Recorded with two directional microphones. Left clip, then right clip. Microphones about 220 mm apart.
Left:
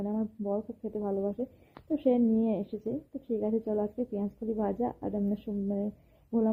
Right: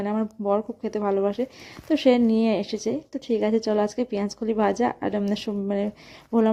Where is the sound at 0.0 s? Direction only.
25° right (ahead or behind).